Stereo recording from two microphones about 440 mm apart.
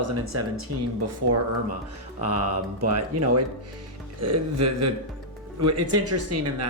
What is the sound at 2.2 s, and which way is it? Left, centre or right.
Speech, right.